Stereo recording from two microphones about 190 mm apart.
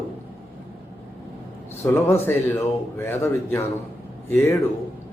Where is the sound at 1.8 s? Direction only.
10° left (ahead or behind).